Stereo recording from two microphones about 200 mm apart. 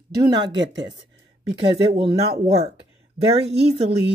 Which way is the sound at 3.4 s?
30° right (ahead or behind).